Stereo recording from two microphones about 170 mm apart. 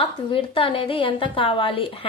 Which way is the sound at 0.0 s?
30° left (ahead or behind).